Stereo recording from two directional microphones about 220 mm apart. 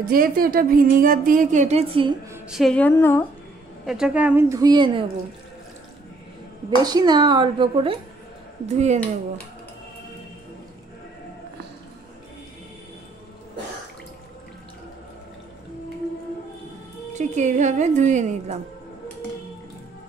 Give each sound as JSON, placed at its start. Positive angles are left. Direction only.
{"t": 0.0, "sound": "speech", "side_deg": -40}
{"t": 2.3, "sound": "a woman's voice", "side_deg": 0}
{"t": 3.8, "sound": "a woman's voice", "side_deg": -5}
{"t": 6.8, "sound": "a woman's voice", "side_deg": -15}
{"t": 17.4, "sound": "speech", "side_deg": -35}